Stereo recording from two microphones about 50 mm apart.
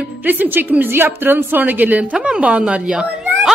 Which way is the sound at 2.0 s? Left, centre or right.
Centre.